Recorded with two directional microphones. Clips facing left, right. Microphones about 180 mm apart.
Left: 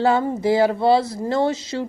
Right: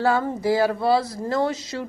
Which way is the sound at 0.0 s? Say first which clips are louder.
Left 3 dB; 20° left (ahead or behind).